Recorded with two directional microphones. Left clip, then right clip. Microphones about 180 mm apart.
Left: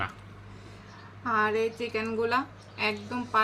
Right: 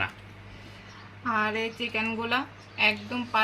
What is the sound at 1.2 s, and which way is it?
A woman's voice, 10° right (ahead or behind).